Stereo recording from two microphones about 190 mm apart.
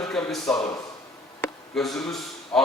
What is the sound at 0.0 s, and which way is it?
Speech, centre (ahead or behind).